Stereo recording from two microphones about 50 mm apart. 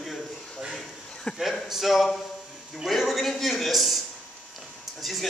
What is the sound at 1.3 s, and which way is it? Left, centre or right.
Speech, centre.